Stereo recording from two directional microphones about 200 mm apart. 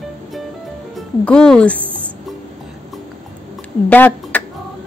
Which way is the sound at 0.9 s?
5° left (ahead or behind).